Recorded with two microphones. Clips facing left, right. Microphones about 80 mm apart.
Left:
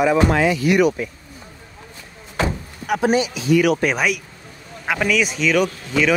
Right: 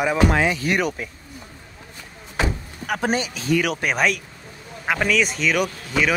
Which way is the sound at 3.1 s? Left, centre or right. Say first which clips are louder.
Left 5 dB; right.